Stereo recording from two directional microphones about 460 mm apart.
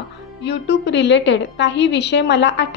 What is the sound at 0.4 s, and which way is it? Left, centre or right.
A woman's voice, left.